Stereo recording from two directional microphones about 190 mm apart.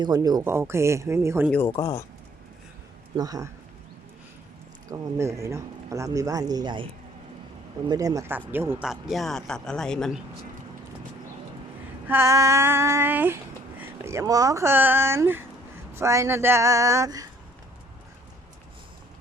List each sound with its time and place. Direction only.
0.0 s female singing: 20° right (ahead or behind)
1.5 s speech: 10° left (ahead or behind)
3.2 s female singing: 20° right (ahead or behind)
4.9 s female singing: 15° right (ahead or behind)
7.9 s speech: 20° right (ahead or behind); by 10.2 s 5° left (ahead or behind)
12.0 s female singing: 15° right (ahead or behind)